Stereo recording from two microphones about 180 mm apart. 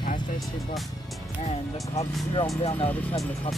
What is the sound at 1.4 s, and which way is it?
Speech, 35° left (ahead or behind).